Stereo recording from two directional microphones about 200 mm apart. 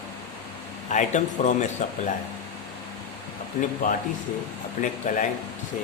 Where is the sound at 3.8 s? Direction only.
40° left (ahead or behind).